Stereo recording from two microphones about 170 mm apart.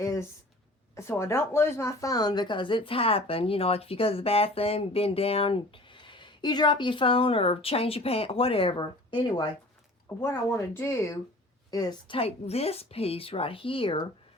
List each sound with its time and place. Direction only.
0.0 s a sound: 20° left (ahead or behind)
0.9 s speech: 15° left (ahead or behind)
10.1 s speech: 15° left (ahead or behind); by 14.0 s 30° left (ahead or behind)